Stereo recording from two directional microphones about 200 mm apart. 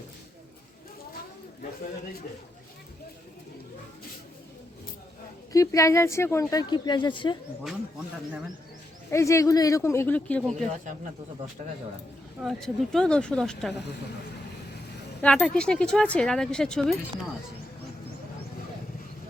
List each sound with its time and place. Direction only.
5.5 s speech: 15° left (ahead or behind)
9.0 s speech: 15° left (ahead or behind)
12.4 s speech: centre (ahead or behind)
15.2 s speech: 5° left (ahead or behind)